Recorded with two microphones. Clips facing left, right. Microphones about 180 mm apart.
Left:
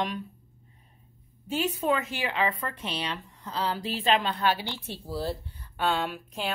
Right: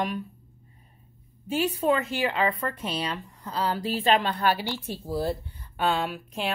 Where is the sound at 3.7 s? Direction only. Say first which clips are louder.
Right 3 dB; 40° right (ahead or behind).